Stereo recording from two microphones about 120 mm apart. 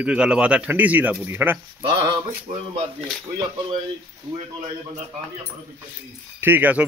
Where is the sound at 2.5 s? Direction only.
70° right (ahead or behind).